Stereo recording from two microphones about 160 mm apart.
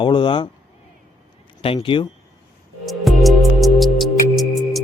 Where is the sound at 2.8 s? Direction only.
Centre (ahead or behind).